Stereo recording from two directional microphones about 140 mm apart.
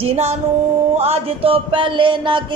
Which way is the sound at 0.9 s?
50° right (ahead or behind).